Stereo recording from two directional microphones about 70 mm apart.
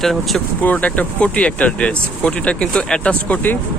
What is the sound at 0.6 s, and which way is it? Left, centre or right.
Speech, left.